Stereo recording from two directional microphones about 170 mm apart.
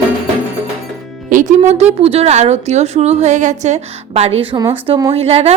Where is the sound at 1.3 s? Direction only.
50° right (ahead or behind).